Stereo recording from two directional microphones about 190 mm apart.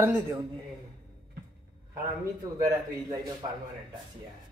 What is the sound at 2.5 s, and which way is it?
Speech, 20° right (ahead or behind).